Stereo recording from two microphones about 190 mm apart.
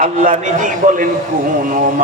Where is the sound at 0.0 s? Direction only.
45° right (ahead or behind).